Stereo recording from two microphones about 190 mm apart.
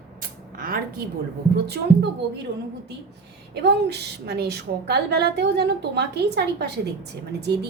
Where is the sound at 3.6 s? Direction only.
60° right (ahead or behind).